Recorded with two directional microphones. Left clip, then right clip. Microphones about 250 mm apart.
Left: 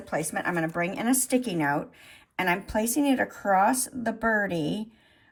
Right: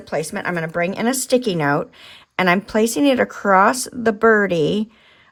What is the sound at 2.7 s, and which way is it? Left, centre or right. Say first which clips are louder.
Speech: right 9 dB; centre.